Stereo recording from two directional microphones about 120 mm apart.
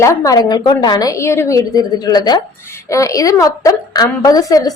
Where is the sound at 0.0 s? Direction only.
25° left (ahead or behind).